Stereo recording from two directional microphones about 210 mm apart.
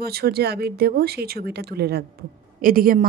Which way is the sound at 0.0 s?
45° right (ahead or behind).